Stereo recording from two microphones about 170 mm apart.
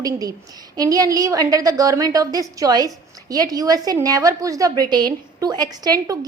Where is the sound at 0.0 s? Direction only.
20° right (ahead or behind).